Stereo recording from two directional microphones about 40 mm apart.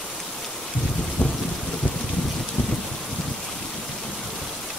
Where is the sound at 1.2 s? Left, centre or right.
Left.